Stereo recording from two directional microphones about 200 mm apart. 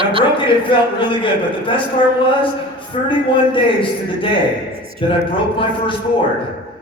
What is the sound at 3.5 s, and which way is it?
A man's voice, 25° left (ahead or behind).